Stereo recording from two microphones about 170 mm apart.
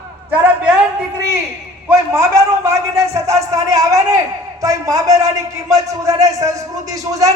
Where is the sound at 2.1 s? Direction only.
15° right (ahead or behind).